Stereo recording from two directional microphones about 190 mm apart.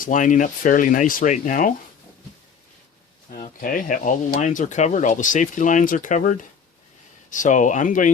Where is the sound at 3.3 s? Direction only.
45° left (ahead or behind).